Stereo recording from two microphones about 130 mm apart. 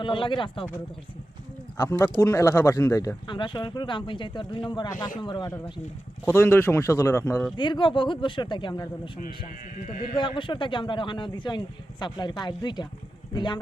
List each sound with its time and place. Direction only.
0.0 s a man's voice: 40° left (ahead or behind)
1.7 s speech: 20° left (ahead or behind)
3.2 s a man's voice: 35° left (ahead or behind)
6.2 s speech: 20° left (ahead or behind)
7.5 s a man's voice: 35° left (ahead or behind)
10.2 s a man's voice: 40° left (ahead or behind)